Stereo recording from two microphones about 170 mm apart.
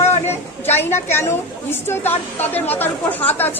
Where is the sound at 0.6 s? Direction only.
15° left (ahead or behind).